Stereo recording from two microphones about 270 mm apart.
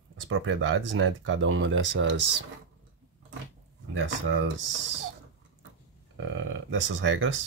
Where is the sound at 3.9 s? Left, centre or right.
Right.